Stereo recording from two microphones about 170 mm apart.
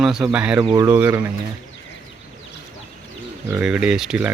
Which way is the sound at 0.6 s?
25° right (ahead or behind).